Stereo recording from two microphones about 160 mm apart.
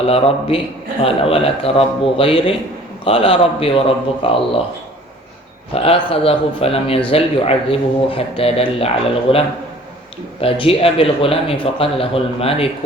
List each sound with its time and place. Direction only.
0.0 s a man's voice: 35° left (ahead or behind)
5.7 s a man's voice: 35° left (ahead or behind)
10.4 s a man's voice: 35° left (ahead or behind)